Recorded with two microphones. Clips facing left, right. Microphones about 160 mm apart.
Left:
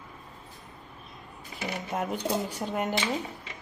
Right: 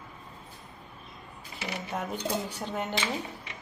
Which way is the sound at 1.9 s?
10° left (ahead or behind).